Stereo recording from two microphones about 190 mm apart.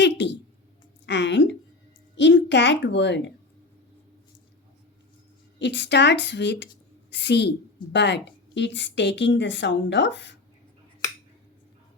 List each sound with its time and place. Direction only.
0.0 s a woman's voice: 65° left (ahead or behind)
5.5 s a woman's voice: 65° left (ahead or behind)